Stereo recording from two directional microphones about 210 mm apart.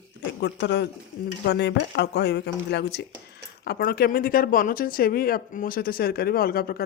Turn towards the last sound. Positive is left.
turn(degrees=45)  # may be behind; listen again after turning